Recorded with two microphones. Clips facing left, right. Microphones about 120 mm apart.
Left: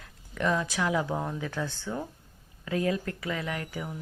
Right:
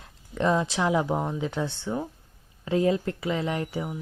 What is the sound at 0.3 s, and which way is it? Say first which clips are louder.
Speech: right 4 dB; 25° right (ahead or behind).